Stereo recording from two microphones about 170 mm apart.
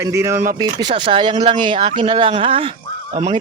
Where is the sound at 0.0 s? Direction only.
15° right (ahead or behind).